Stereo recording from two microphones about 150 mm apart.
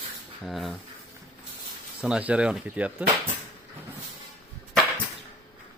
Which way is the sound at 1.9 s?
10° right (ahead or behind).